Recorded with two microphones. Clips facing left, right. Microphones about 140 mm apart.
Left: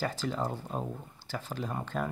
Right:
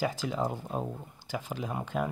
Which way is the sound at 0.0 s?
10° right (ahead or behind).